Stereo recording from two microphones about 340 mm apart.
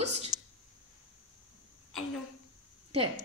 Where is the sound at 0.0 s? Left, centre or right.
Centre.